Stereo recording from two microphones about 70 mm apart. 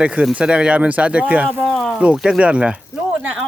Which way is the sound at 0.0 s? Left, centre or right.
Centre.